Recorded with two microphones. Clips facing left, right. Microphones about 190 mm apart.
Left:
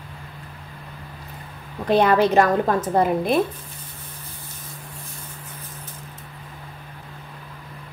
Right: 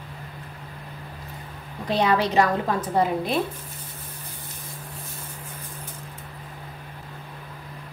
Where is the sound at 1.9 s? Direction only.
50° left (ahead or behind).